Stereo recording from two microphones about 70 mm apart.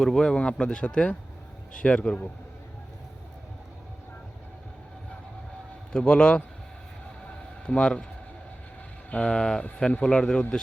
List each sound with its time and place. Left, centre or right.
0.0 s speech: centre
5.9 s speech: centre
7.7 s speech: centre
9.0 s speech: centre
9.3 s speech: centre